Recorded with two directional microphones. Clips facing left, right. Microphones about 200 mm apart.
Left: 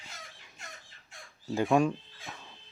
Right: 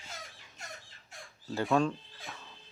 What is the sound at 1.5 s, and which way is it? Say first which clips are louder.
Speech: left 3 dB; 15° left (ahead or behind).